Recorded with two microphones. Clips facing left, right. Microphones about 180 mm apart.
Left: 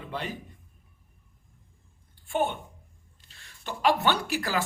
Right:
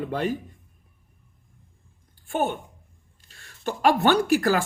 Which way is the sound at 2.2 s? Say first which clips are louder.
Right 2 dB; 45° right (ahead or behind).